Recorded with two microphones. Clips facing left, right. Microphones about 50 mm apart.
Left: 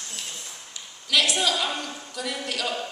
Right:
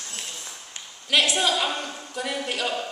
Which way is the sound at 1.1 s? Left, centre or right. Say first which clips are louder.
Right 1 dB; right.